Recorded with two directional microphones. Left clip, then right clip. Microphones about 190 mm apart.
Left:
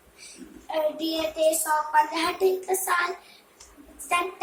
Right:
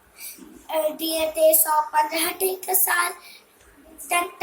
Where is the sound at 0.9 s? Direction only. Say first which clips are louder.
Right 4 dB; 15° left (ahead or behind).